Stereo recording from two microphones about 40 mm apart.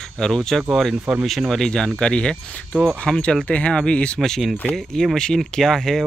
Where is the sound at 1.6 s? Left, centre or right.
Centre.